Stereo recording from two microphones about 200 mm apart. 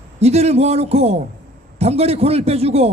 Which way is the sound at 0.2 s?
30° right (ahead or behind).